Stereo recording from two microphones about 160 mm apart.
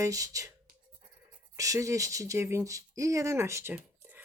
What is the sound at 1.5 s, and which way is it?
Speech, 20° right (ahead or behind).